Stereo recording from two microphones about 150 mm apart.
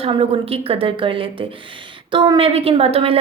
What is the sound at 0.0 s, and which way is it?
A woman's voice, 40° right (ahead or behind).